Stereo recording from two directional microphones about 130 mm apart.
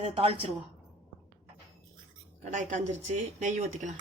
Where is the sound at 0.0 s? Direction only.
50° right (ahead or behind).